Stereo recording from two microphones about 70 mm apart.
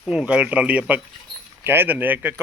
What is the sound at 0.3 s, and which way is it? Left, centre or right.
Speech, centre.